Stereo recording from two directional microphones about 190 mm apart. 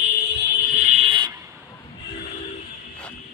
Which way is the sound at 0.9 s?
30° right (ahead or behind).